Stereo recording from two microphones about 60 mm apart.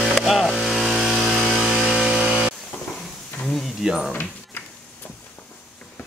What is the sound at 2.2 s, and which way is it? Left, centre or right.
Music, centre.